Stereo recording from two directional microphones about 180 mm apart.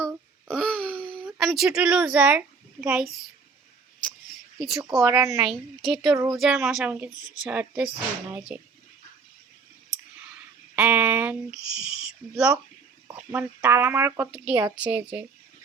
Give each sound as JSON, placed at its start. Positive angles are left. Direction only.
{"t": 0.0, "sound": "a sound", "side_deg": 5}
{"t": 1.4, "sound": "a woman's voice", "side_deg": 0}
{"t": 4.5, "sound": "speech", "side_deg": -5}
{"t": 5.0, "sound": "speech", "side_deg": -15}
{"t": 5.4, "sound": "a woman's voice", "side_deg": 0}
{"t": 10.8, "sound": "speech", "side_deg": -5}